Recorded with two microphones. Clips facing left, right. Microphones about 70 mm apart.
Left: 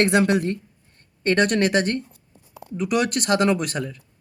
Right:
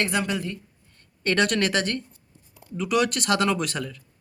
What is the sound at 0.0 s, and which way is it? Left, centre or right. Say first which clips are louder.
Speech: left 7 dB; left.